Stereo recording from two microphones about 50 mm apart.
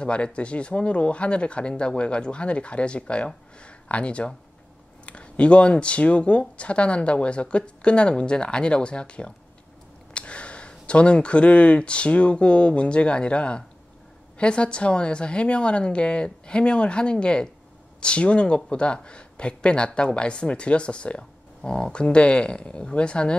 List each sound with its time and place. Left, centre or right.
0.0 s speech: left